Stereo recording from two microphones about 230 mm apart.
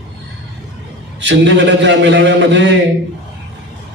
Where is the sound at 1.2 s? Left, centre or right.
Right.